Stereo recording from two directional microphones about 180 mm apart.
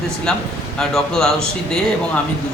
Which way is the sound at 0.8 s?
Centre (ahead or behind).